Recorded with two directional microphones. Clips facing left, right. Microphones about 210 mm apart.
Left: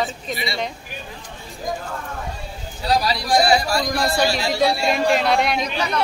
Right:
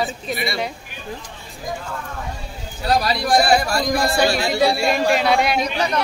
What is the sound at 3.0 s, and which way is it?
A man's voice, 55° right (ahead or behind).